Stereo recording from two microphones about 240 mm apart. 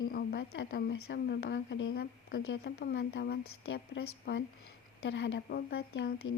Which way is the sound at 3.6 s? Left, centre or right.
Left.